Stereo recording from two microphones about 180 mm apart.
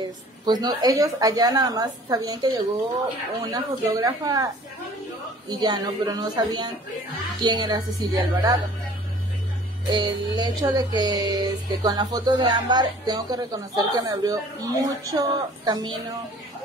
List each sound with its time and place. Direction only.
0.0 s speech: 20° right (ahead or behind)
5.5 s speech: 20° right (ahead or behind)
9.8 s speech: 25° right (ahead or behind)